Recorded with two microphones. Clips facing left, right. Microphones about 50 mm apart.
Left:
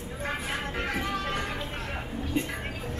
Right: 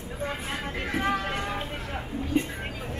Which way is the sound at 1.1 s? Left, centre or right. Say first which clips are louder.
Right 2 dB; right.